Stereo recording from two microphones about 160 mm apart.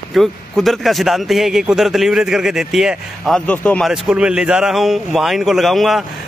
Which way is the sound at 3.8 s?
5° right (ahead or behind).